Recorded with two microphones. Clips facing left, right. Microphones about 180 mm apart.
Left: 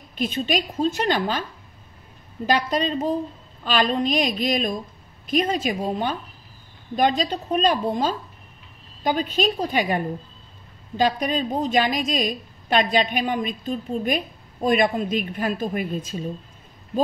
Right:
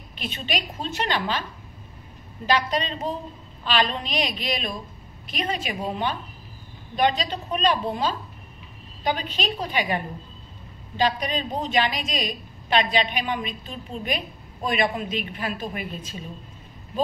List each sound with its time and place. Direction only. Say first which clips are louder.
0.2 s a woman's voice: left 7 dB; 45° left (ahead or behind)
2.4 s a woman's voice: left 2 dB; 45° left (ahead or behind)